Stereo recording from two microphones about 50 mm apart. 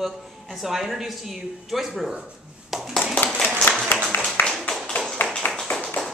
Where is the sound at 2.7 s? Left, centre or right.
Centre.